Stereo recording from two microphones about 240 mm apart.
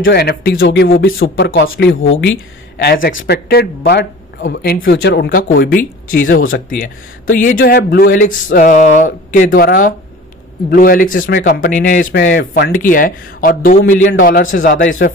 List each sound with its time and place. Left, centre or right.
0.0 s speech: left
12.2 s speech: left